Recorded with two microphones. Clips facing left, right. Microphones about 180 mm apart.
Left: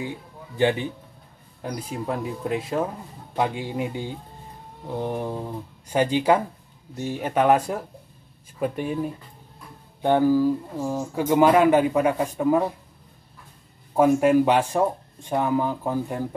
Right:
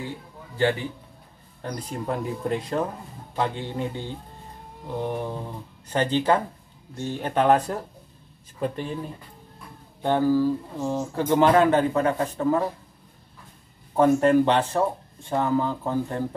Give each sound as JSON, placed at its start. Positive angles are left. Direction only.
{"t": 0.6, "sound": "speech", "side_deg": 15}
{"t": 13.9, "sound": "speech", "side_deg": 10}